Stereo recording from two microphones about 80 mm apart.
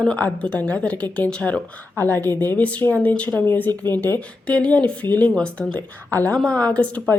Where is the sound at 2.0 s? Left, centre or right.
Left.